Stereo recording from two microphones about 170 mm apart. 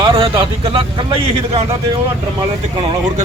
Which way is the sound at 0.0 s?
30° right (ahead or behind).